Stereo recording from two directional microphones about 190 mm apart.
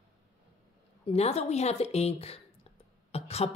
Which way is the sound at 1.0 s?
35° left (ahead or behind).